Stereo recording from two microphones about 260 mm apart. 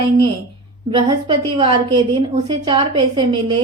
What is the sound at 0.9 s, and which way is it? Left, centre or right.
A woman's voice, centre.